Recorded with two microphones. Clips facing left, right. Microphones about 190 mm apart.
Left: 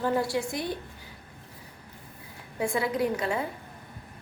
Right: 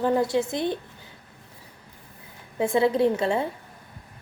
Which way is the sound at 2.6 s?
25° right (ahead or behind).